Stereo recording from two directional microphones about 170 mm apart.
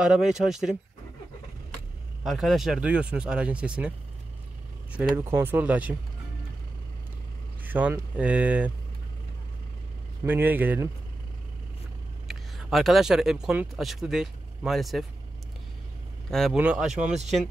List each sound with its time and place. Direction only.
0.0 s speech: 5° right (ahead or behind)
2.2 s speech: centre (ahead or behind)
4.9 s speech: 10° right (ahead or behind)
7.6 s speech: 10° right (ahead or behind)
10.2 s speech: 10° right (ahead or behind)
12.3 s speech: centre (ahead or behind)
16.3 s a man's voice: centre (ahead or behind)
17.1 s speech: 40° right (ahead or behind)